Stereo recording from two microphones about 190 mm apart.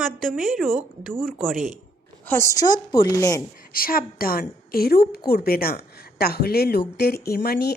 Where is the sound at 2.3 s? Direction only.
15° left (ahead or behind).